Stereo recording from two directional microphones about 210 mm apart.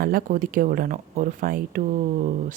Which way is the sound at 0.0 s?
45° right (ahead or behind).